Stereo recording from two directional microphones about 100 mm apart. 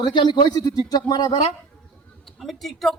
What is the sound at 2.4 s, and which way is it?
Speech, centre (ahead or behind).